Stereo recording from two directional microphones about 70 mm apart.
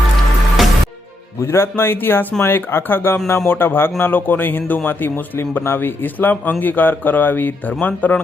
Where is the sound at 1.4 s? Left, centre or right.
Left.